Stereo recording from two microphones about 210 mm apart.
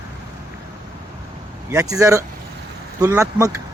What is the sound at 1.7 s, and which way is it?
Speech, 15° right (ahead or behind).